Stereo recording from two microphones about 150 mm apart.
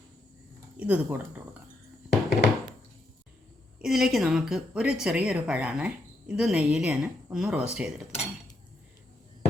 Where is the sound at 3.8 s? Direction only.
5° right (ahead or behind).